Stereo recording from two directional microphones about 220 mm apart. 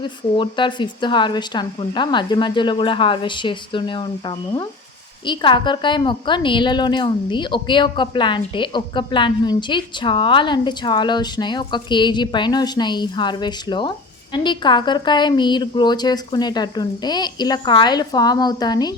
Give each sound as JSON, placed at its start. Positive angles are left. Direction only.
{"t": 0.0, "sound": "a woman's voice", "side_deg": 20}